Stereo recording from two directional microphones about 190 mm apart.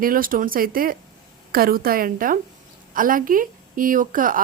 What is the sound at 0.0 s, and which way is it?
A woman's voice, 50° right (ahead or behind).